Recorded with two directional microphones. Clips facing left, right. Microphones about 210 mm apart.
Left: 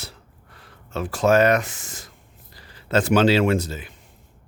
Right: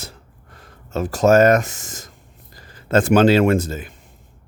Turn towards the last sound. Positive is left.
turn(degrees=-50)  # may be behind; listen again after turning